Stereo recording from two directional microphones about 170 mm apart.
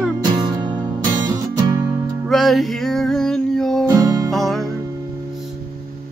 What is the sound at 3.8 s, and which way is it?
Music, 25° right (ahead or behind).